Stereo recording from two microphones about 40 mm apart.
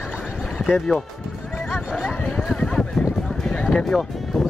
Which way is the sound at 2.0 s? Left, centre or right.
Left.